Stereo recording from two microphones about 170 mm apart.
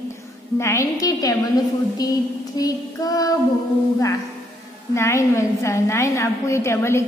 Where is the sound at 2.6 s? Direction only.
20° left (ahead or behind).